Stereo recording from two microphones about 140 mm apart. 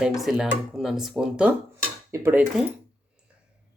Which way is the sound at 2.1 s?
20° right (ahead or behind).